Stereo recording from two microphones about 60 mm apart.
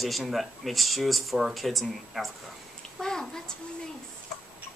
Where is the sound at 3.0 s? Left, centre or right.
Centre.